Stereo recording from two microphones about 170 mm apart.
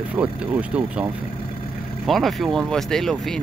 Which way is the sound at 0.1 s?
10° right (ahead or behind).